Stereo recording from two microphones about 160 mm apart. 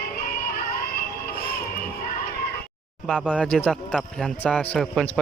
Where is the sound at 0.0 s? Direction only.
65° left (ahead or behind).